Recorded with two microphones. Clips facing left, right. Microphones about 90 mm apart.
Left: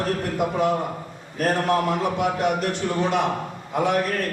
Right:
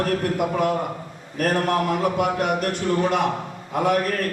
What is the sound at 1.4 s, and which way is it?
A man's voice, 50° right (ahead or behind).